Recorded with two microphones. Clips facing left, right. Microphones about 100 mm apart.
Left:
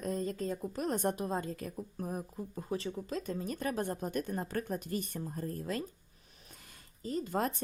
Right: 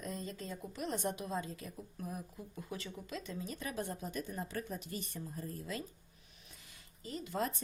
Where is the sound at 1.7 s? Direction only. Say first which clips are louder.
Left 6 dB; 40° left (ahead or behind).